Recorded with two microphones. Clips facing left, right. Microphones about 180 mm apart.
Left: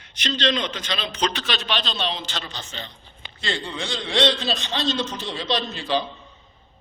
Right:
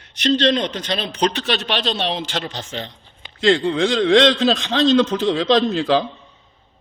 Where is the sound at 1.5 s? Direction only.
65° right (ahead or behind); by 6.0 s 90° right.